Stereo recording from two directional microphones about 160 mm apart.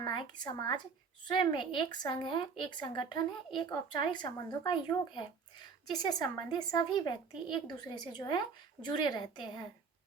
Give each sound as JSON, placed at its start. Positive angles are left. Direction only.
{"t": 0.0, "sound": "speech", "side_deg": 30}